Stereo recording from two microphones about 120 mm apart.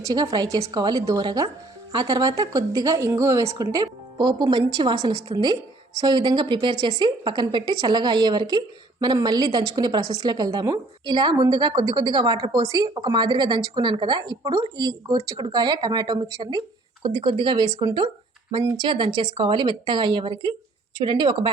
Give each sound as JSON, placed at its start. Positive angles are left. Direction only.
{"t": 0.0, "sound": "a woman's voice", "side_deg": -35}